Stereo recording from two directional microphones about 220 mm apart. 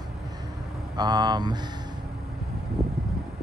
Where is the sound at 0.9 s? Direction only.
20° right (ahead or behind).